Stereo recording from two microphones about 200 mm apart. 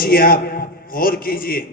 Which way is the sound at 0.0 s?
45° left (ahead or behind).